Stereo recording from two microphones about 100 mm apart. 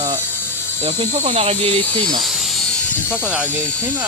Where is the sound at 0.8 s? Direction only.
90° right.